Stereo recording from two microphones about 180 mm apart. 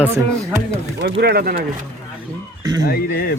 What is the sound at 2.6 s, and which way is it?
Speech, 20° right (ahead or behind).